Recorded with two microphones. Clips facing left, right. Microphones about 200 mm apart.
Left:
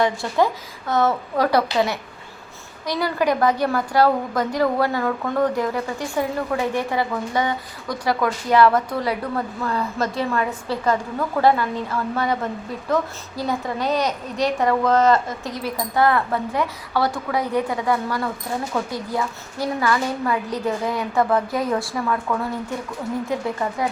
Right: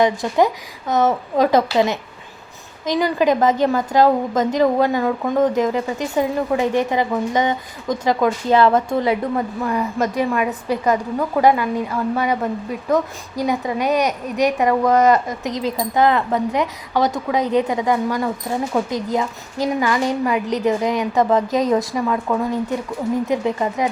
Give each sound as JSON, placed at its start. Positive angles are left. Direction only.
{"t": 0.0, "sound": "a woman's voice", "side_deg": -15}